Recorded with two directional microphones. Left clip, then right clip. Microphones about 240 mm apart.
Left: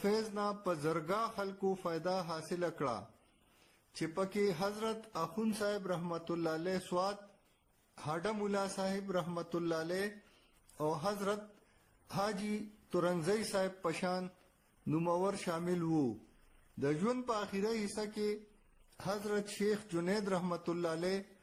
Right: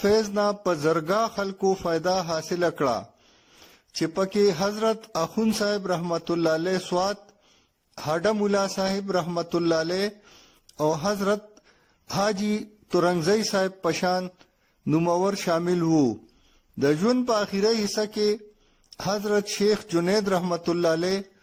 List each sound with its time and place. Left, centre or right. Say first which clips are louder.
0.0 s speech: right 14 dB; right